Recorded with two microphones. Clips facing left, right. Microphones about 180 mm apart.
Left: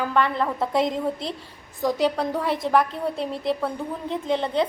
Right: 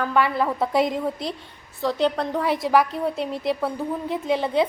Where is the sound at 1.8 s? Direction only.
10° left (ahead or behind).